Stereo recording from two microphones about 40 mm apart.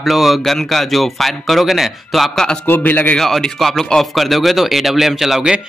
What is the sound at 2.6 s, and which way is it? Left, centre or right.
Speech, left.